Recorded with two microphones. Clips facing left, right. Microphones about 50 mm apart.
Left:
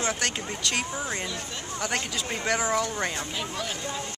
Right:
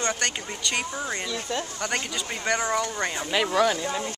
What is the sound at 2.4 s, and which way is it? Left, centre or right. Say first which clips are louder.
Speech: right 1 dB; centre.